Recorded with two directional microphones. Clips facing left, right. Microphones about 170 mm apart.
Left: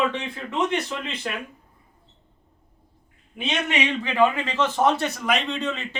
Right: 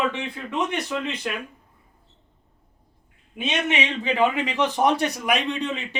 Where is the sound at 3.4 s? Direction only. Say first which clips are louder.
Even; 20° right (ahead or behind).